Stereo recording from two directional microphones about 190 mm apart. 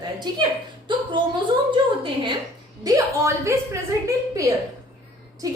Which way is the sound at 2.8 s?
15° right (ahead or behind).